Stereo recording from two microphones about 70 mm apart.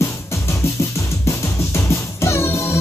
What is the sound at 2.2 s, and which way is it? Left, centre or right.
Music, left.